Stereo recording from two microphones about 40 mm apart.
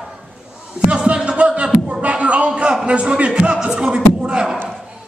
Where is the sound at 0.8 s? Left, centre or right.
Centre.